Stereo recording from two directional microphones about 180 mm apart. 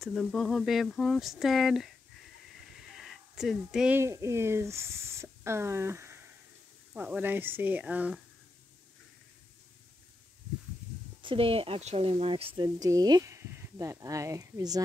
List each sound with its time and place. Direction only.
0.0 s speech: 5° left (ahead or behind)
2.9 s speech: centre (ahead or behind)
11.2 s speech: 30° right (ahead or behind)